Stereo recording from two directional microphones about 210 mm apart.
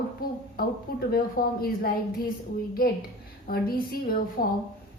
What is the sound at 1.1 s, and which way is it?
A woman's voice, 45° left (ahead or behind).